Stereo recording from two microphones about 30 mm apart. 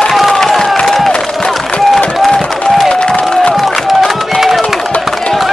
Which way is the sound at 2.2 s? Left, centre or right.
Centre.